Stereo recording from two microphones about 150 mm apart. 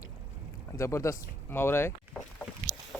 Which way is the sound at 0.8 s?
20° left (ahead or behind).